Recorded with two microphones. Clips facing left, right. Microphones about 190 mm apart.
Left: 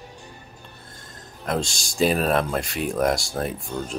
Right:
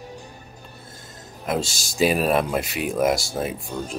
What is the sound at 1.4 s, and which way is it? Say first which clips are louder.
Speech: right 1 dB; 5° right (ahead or behind).